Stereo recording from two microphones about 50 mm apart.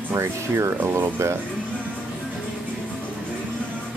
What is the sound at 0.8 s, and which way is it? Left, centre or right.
Speech, right.